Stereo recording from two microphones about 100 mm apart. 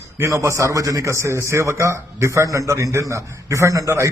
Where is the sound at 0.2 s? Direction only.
30° right (ahead or behind).